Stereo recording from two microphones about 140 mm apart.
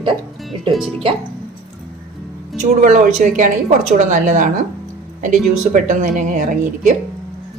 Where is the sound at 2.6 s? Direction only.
65° right (ahead or behind).